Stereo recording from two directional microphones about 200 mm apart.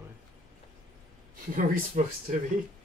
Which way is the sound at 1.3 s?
45° right (ahead or behind).